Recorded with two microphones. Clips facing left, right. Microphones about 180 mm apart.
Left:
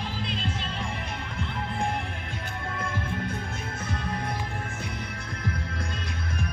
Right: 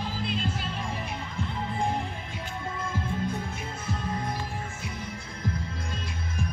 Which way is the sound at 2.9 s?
65° left (ahead or behind).